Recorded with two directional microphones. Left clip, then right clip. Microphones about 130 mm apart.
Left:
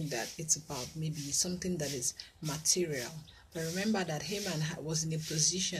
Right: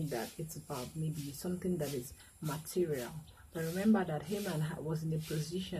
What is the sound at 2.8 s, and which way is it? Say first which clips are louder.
Speech: even; 15° left (ahead or behind).